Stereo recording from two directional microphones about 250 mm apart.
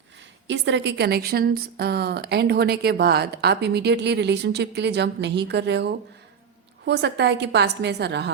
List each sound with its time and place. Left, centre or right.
0.4 s a woman's voice: right